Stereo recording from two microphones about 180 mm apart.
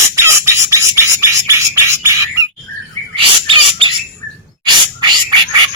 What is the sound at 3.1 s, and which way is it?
Bird, 30° right (ahead or behind).